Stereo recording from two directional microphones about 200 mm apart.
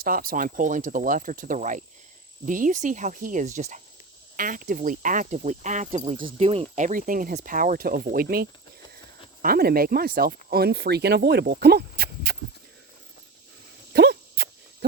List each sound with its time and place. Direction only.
0.0 s speech: 45° right (ahead or behind)
13.9 s dog: 55° right (ahead or behind)